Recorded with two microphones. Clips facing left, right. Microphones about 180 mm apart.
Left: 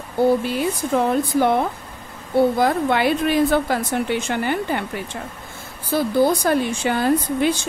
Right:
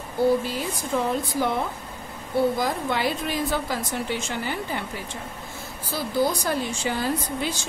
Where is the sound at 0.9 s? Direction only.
60° left (ahead or behind).